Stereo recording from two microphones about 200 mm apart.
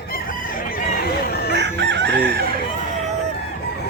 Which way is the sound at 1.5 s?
60° right (ahead or behind).